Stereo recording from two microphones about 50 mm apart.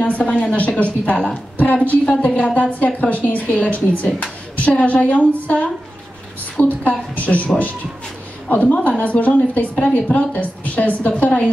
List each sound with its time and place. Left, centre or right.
0.0 s a woman's voice: left
6.8 s a woman's voice: left